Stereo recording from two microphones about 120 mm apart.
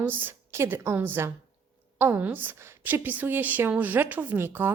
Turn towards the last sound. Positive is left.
turn(degrees=-20)  # may be behind; listen again after turning